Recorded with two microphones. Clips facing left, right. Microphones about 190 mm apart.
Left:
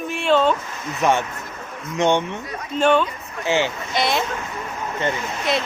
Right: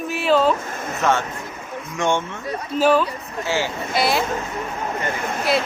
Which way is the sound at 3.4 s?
20° left (ahead or behind).